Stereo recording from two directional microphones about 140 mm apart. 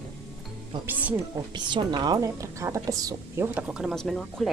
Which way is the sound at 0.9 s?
10° right (ahead or behind).